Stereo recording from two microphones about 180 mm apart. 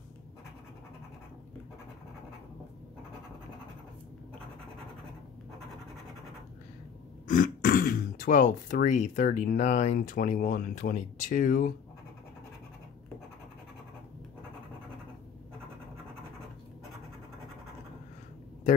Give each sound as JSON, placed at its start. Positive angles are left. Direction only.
{"t": 7.2, "sound": "speech", "side_deg": 50}